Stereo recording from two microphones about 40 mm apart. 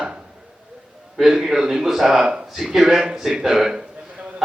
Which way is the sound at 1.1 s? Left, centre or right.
Centre.